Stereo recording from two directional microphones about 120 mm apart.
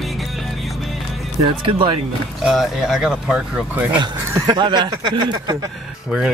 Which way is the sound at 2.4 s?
Centre (ahead or behind).